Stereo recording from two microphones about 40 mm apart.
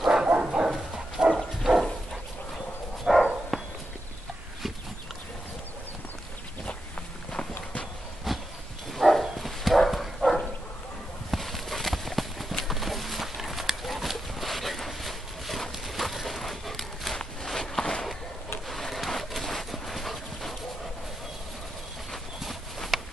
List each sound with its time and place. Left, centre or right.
0.0 s bow-wow: centre
0.4 s bow-wow: right
1.6 s dog: centre
3.1 s a sound: centre
8.3 s horse: centre
8.9 s dog: centre
11.2 s horse: centre
17.5 s walk: centre
18.7 s dog: centre
22.9 s a sound: centre